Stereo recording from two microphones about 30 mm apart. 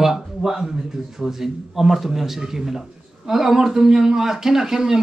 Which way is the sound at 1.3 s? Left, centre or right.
Centre.